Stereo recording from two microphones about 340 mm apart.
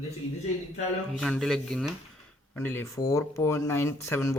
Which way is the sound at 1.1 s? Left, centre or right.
Centre.